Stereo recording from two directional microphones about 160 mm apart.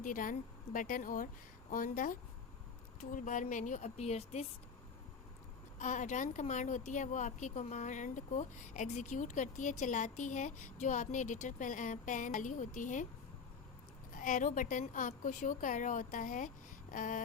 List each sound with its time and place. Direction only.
0.0 s a woman's voice: 55° left (ahead or behind); by 4.4 s 40° left (ahead or behind)
5.8 s a woman's voice: 50° left (ahead or behind)
14.1 s a woman's voice: 55° left (ahead or behind)